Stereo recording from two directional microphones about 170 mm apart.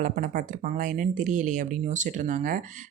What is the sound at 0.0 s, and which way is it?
Speech, 50° right (ahead or behind).